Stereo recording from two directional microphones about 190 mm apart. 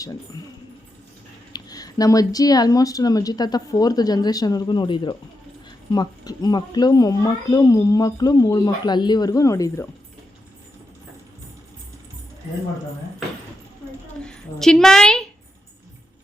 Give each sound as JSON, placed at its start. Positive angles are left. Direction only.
{"t": 1.5, "sound": "speech", "side_deg": 20}
{"t": 14.3, "sound": "a woman's voice", "side_deg": 5}